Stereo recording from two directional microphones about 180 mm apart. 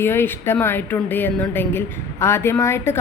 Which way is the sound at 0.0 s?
15° left (ahead or behind).